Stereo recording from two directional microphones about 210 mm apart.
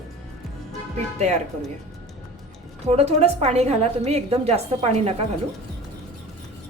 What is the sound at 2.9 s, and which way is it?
A woman's voice, 30° right (ahead or behind).